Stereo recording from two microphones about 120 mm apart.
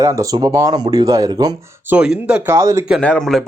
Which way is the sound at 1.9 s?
10° right (ahead or behind).